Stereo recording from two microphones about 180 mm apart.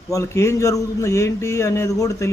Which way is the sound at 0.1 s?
15° left (ahead or behind).